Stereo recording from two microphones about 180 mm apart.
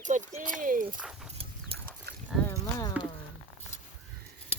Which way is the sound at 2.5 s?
20° left (ahead or behind).